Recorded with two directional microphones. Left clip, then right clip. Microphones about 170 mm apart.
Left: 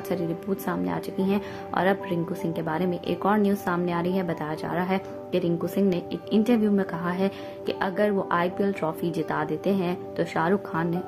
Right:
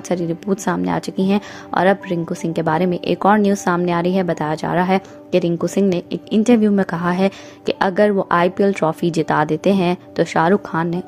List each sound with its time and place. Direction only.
0.1 s a woman's voice: 45° right (ahead or behind)